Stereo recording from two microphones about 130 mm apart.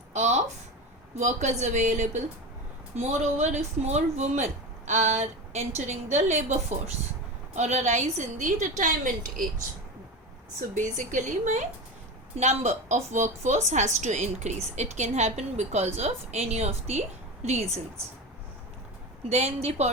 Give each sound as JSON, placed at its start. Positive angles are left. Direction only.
{"t": 0.1, "sound": "a sound", "side_deg": -65}
{"t": 1.2, "sound": "a woman's voice", "side_deg": -65}
{"t": 8.8, "sound": "speech", "side_deg": -90}
{"t": 10.8, "sound": "a woman's voice", "side_deg": -75}
{"t": 19.3, "sound": "a woman's voice", "side_deg": -55}